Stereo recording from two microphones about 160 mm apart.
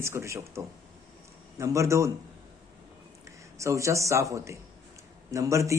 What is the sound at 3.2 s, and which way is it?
A man's voice, 20° right (ahead or behind).